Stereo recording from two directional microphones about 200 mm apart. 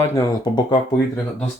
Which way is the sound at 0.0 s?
15° left (ahead or behind).